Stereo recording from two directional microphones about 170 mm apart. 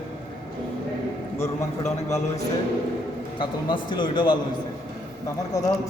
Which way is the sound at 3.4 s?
30° left (ahead or behind).